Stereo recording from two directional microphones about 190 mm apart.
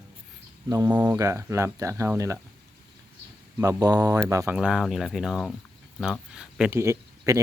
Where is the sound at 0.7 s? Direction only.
15° right (ahead or behind).